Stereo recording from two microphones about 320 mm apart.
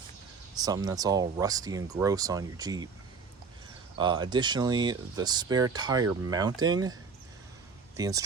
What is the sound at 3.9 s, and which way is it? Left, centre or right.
Speech, centre.